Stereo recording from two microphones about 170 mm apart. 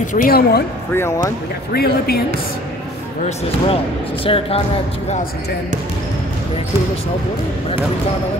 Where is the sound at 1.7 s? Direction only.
65° left (ahead or behind).